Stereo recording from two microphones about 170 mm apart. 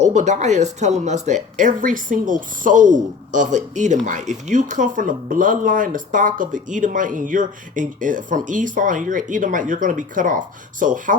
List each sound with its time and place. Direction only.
0.0 s speech: 45° right (ahead or behind)